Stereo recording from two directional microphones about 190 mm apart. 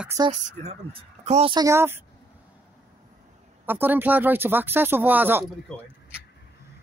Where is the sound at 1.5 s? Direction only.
15° right (ahead or behind).